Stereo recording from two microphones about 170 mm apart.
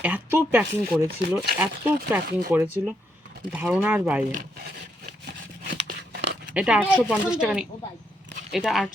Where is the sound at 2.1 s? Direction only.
10° right (ahead or behind).